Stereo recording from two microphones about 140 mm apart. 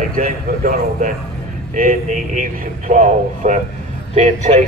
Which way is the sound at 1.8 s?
75° right (ahead or behind).